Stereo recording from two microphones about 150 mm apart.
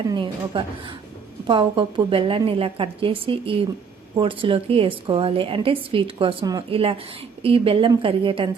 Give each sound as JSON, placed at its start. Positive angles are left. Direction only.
{"t": 0.1, "sound": "a woman's voice", "side_deg": -30}
{"t": 6.7, "sound": "a woman's voice", "side_deg": -40}